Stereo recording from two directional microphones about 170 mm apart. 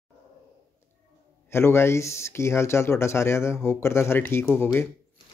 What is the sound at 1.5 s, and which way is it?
Speech, 15° left (ahead or behind).